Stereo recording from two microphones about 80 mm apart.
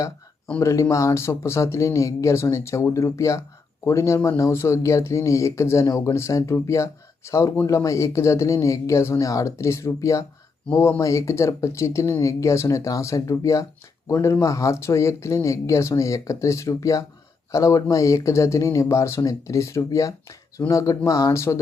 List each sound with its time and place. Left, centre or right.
0.6 s speech: left